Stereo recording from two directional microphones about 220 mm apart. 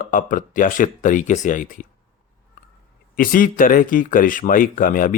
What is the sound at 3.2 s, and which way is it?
Speech, 40° left (ahead or behind).